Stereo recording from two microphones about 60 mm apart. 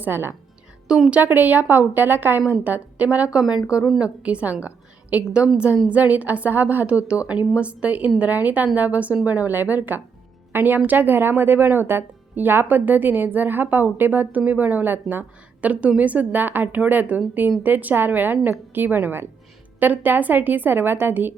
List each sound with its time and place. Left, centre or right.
0.0 s speech: right
0.9 s a woman's voice: centre
1.2 s a woman's voice: right